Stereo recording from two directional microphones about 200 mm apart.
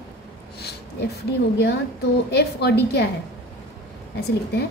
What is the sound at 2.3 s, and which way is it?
Speech, 55° left (ahead or behind).